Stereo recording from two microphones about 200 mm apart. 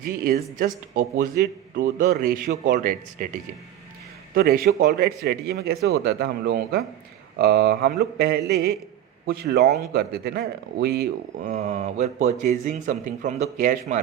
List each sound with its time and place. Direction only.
0.0 s speech: 45° right (ahead or behind)
11.5 s speech: 35° right (ahead or behind)